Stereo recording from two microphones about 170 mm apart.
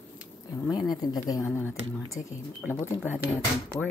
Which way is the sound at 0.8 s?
20° left (ahead or behind).